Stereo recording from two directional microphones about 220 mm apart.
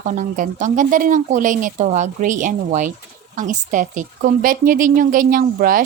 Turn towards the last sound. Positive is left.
turn(degrees=-40)  # may be behind; listen again after turning